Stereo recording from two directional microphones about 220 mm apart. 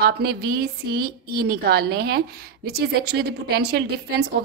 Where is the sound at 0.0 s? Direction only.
45° right (ahead or behind).